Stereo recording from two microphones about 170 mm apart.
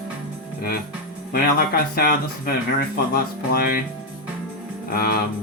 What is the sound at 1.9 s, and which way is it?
Speech, 60° left (ahead or behind).